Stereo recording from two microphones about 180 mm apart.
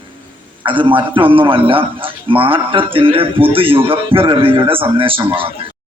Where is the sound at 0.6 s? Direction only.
25° right (ahead or behind).